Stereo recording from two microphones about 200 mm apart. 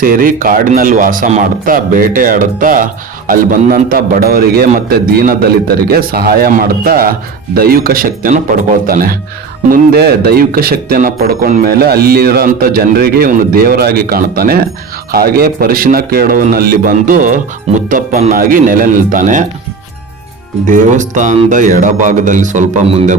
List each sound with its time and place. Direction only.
0.0 s speech: 45° right (ahead or behind)
20.7 s speech: 40° right (ahead or behind)